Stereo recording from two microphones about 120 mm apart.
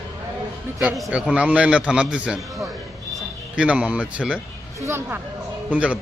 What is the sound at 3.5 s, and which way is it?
Speech, 10° right (ahead or behind).